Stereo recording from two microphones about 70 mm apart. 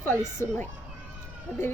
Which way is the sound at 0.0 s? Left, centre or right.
Left.